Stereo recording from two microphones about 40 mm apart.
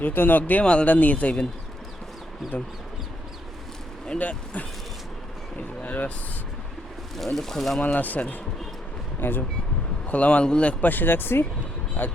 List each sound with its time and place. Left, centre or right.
0.0 s speech: left
0.6 s speech: left
0.9 s speech: left
4.2 s speech: left
7.3 s speech: centre
7.8 s speech: left
9.2 s speech: left
10.1 s speech: left
10.8 s speech: left